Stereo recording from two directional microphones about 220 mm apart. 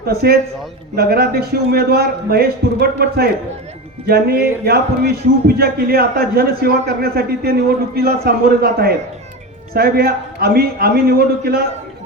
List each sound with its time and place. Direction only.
0.0 s a man's voice: 45° right (ahead or behind)
4.6 s a man's voice: 45° right (ahead or behind)